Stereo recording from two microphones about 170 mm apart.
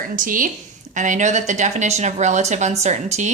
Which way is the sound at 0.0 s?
55° right (ahead or behind).